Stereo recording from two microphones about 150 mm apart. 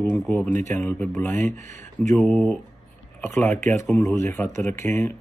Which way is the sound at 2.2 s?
5° left (ahead or behind).